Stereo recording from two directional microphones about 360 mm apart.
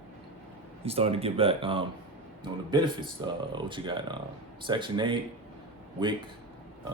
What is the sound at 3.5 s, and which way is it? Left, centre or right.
A man's voice, centre.